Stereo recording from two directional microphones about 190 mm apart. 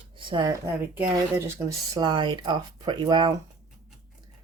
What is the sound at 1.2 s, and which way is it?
Speech, 15° right (ahead or behind).